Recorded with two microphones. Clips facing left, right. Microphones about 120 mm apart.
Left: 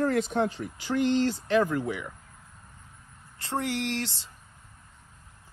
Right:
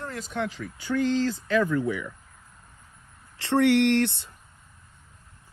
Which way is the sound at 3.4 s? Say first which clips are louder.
Right 10 dB; 70° right (ahead or behind).